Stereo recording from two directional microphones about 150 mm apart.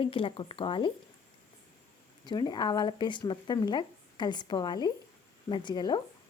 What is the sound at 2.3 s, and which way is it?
Speech, 30° left (ahead or behind).